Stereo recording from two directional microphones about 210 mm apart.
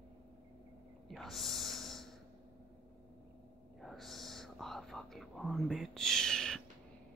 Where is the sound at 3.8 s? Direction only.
Centre (ahead or behind).